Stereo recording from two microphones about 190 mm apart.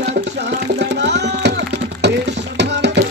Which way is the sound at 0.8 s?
65° right (ahead or behind).